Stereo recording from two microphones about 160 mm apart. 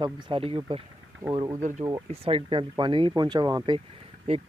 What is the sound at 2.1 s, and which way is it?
Speech, 35° right (ahead or behind).